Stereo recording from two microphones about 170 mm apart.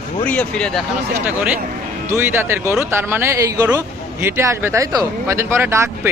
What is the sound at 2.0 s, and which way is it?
A man's voice, 15° right (ahead or behind).